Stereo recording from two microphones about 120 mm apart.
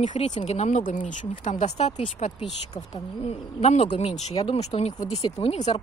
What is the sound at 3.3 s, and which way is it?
Speech, 65° left (ahead or behind).